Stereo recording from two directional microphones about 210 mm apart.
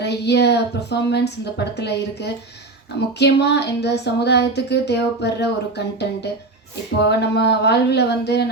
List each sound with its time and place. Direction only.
0.0 s speech: 55° left (ahead or behind)